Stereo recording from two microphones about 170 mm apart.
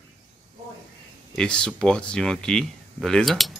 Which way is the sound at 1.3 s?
5° left (ahead or behind).